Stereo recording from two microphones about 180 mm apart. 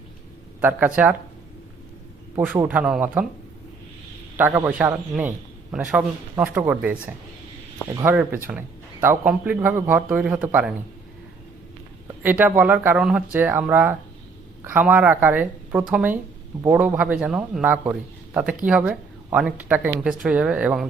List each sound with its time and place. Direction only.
0.6 s a man's voice: 10° right (ahead or behind)
2.3 s a man's voice: 15° right (ahead or behind)
4.4 s a man's voice: 10° right (ahead or behind)
7.9 s a man's voice: 20° right (ahead or behind)
12.2 s a man's voice: 10° right (ahead or behind)